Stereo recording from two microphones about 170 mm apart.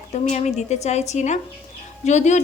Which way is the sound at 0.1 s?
40° left (ahead or behind).